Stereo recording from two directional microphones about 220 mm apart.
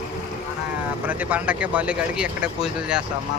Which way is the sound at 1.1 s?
5° right (ahead or behind).